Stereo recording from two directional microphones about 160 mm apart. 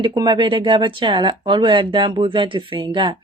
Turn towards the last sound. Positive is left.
turn(degrees=-30)  # may be behind; listen again after turning